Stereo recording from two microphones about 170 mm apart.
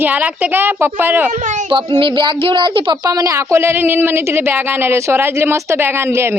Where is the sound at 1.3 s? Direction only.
45° right (ahead or behind).